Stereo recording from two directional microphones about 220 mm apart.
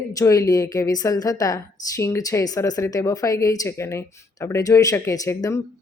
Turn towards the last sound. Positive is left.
turn(degrees=15)  # may be behind; listen again after turning